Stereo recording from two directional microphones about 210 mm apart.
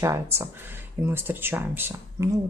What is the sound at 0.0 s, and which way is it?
Speech, 15° right (ahead or behind).